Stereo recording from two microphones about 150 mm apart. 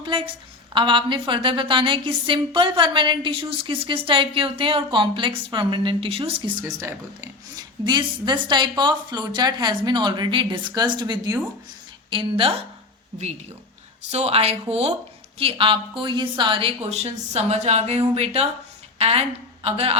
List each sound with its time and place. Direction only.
0.0 s a sound: 35° right (ahead or behind)
0.7 s a woman's voice: 35° right (ahead or behind)
12.1 s a woman's voice: 35° right (ahead or behind)
14.1 s a woman's voice: 45° right (ahead or behind)